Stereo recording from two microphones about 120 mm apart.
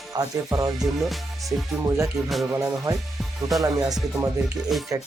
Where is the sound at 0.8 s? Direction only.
Centre (ahead or behind).